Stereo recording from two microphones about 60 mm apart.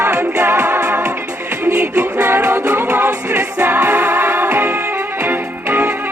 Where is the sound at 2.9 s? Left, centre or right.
Right.